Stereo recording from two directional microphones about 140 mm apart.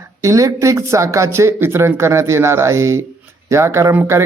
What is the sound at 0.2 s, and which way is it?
Speech, 20° right (ahead or behind).